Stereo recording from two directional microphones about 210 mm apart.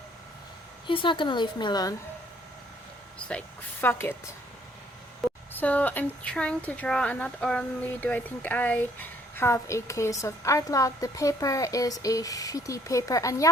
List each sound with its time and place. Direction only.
0.9 s a woman's voice: 25° left (ahead or behind)
3.2 s speech: 10° left (ahead or behind)
5.2 s a sound: centre (ahead or behind)
5.5 s speech: 5° left (ahead or behind)